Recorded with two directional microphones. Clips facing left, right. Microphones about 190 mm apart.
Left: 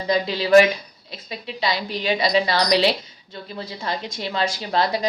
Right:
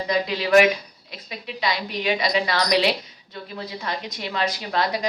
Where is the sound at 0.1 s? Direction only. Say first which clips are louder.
Left 3 dB; 30° left (ahead or behind).